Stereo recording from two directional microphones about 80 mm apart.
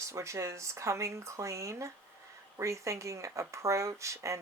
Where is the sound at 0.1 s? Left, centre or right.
Right.